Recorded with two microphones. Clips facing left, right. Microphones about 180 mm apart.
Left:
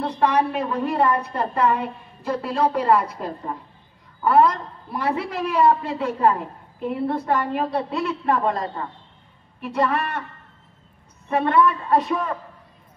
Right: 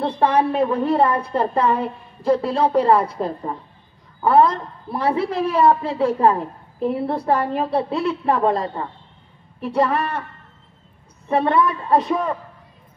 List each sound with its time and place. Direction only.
0.0 s a woman's voice: 30° right (ahead or behind)
11.2 s a woman's voice: 35° right (ahead or behind)